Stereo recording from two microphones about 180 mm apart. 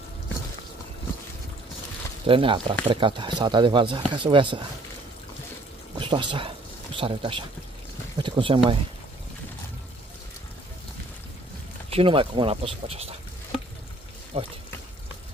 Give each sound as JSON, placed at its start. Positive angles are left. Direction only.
{"t": 2.2, "sound": "speech", "side_deg": -30}
{"t": 5.9, "sound": "speech", "side_deg": -25}
{"t": 11.9, "sound": "speech", "side_deg": -30}
{"t": 14.3, "sound": "speech", "side_deg": -30}